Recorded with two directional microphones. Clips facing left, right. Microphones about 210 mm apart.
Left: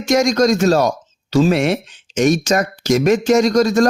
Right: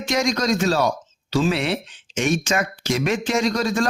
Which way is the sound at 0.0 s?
45° left (ahead or behind).